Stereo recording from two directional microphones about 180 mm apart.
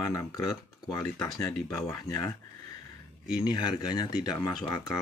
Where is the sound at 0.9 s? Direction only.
20° left (ahead or behind).